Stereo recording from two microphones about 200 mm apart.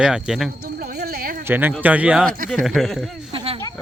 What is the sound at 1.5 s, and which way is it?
Speech, 10° right (ahead or behind).